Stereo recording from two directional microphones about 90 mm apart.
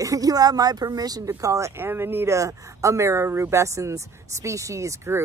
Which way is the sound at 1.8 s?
25° right (ahead or behind).